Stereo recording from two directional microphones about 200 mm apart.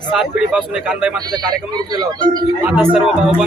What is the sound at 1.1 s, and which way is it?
Speech, 20° right (ahead or behind).